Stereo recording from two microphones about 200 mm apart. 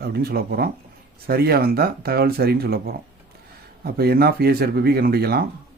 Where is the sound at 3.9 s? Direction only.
50° right (ahead or behind).